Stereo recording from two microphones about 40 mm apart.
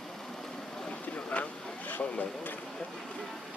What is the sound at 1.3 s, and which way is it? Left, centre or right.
Vehicle, left.